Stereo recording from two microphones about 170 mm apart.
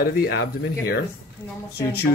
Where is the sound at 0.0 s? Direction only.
65° left (ahead or behind).